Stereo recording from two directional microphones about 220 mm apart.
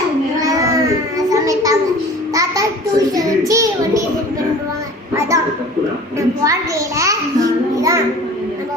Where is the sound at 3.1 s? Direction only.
15° right (ahead or behind).